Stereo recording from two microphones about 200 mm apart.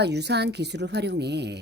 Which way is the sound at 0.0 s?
55° right (ahead or behind).